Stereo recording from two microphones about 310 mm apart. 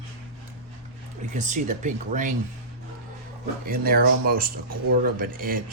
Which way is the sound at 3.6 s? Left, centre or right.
Right.